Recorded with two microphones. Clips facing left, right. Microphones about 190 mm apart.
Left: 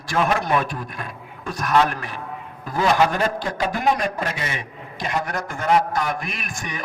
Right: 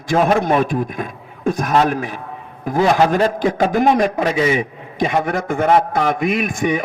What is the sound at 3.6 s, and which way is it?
Speech, 50° right (ahead or behind).